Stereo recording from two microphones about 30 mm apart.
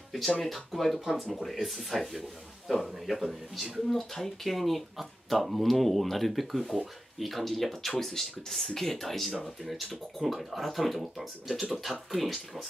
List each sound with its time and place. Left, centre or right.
0.4 s speech: centre